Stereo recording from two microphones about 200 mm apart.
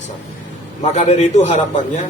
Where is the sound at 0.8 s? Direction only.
35° left (ahead or behind).